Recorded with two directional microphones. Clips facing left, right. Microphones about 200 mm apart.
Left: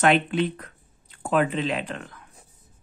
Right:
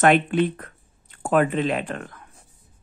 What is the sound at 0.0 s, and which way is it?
Speech, 50° right (ahead or behind).